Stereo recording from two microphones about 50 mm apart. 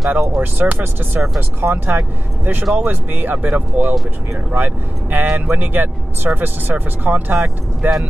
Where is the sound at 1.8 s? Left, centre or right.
Right.